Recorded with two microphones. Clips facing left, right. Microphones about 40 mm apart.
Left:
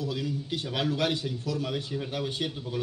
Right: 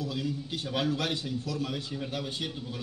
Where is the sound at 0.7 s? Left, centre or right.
Left.